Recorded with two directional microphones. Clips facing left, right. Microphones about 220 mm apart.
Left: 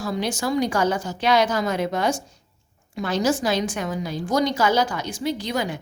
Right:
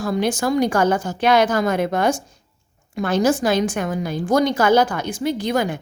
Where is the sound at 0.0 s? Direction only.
50° right (ahead or behind).